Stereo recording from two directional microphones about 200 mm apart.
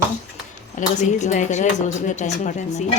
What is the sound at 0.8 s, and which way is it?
Speech, 40° left (ahead or behind).